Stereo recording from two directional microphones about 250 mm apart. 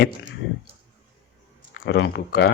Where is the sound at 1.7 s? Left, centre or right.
Left.